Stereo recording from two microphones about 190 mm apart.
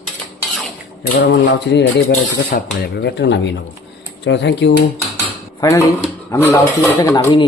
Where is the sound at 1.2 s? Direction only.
65° left (ahead or behind).